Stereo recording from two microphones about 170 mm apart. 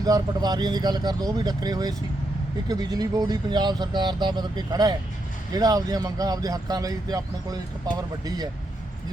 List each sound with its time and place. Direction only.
0.0 s speech: 20° right (ahead or behind)